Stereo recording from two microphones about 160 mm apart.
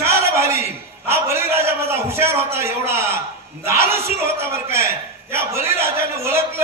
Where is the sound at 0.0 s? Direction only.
15° right (ahead or behind).